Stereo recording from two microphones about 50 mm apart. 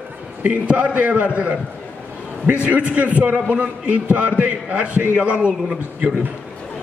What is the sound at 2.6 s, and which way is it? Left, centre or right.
A man's voice, right.